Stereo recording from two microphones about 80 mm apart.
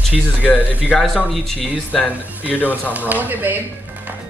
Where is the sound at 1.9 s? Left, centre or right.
Centre.